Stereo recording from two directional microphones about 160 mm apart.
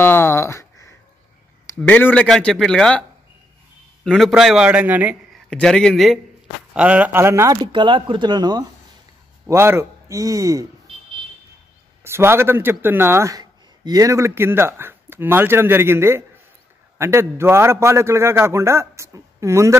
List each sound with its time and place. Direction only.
0.0 s a sound: 15° left (ahead or behind)
1.8 s speech: 10° left (ahead or behind); by 5.1 s 10° right (ahead or behind)
5.3 s a man's voice: 5° left (ahead or behind); by 8.6 s 25° right (ahead or behind)
9.5 s speech: 15° right (ahead or behind)
12.0 s a man's voice: 15° right (ahead or behind)